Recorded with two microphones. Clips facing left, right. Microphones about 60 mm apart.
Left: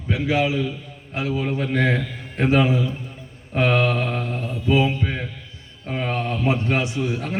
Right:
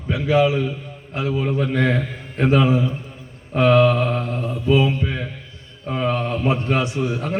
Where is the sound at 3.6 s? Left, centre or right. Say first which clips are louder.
Right 5 dB; centre.